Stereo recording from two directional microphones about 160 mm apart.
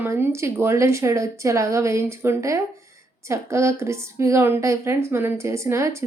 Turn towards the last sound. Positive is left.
turn(degrees=-15)  # may be behind; listen again after turning